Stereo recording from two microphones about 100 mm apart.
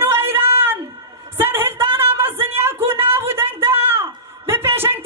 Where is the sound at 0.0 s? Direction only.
25° right (ahead or behind).